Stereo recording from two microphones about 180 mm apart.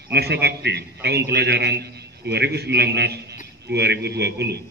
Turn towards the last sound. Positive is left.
turn(degrees=-65)  # may be behind; listen again after turning